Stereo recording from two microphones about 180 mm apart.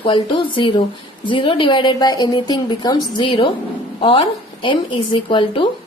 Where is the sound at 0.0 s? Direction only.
30° left (ahead or behind).